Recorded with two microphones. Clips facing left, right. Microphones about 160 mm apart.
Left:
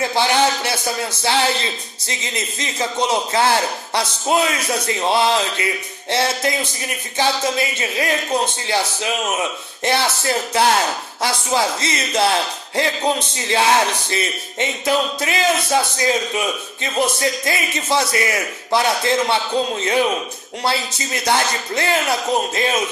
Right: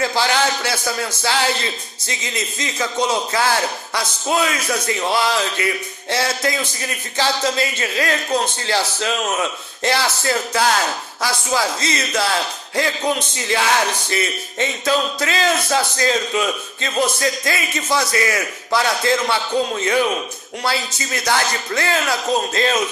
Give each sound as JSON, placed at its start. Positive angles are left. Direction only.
{"t": 0.0, "sound": "a man's voice", "side_deg": 20}